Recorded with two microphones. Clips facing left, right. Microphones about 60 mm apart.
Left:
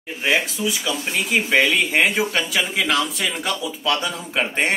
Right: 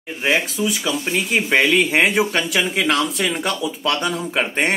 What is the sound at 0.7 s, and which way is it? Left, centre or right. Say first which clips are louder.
Speech: right 2 dB; centre.